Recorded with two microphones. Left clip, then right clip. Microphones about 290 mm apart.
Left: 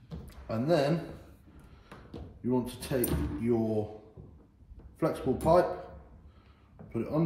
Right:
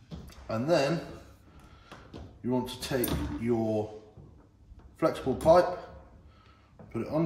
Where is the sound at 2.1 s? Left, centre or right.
Centre.